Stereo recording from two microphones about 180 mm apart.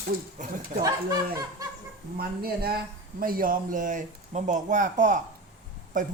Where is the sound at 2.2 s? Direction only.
60° right (ahead or behind); by 6.1 s 45° right (ahead or behind).